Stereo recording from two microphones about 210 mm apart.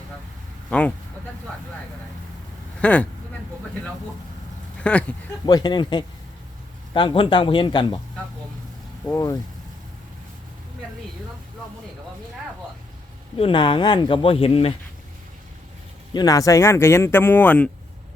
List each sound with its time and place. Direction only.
0.7 s speech: 5° left (ahead or behind)
2.8 s speech: 5° left (ahead or behind)
4.8 s speech: 5° left (ahead or behind)
5.5 s speech: 20° left (ahead or behind)
9.1 s speech: 15° left (ahead or behind)
13.4 s speech: 25° left (ahead or behind)
16.1 s speech: 15° left (ahead or behind)